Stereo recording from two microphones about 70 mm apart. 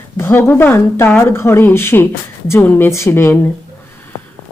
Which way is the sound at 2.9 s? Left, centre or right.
Left.